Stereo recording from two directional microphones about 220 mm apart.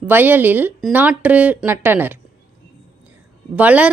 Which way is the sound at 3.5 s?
5° right (ahead or behind).